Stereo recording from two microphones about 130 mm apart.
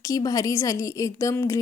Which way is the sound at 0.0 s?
25° left (ahead or behind).